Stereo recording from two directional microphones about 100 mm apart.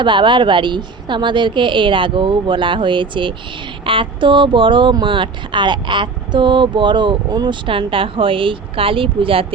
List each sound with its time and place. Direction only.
0.0 s a woman's voice: 55° right (ahead or behind)
7.7 s speech: 60° right (ahead or behind)